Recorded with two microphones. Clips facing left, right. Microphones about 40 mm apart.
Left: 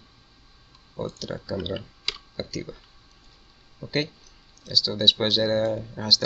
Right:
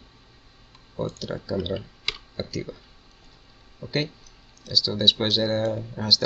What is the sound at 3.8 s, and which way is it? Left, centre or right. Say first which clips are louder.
Speech: even; centre.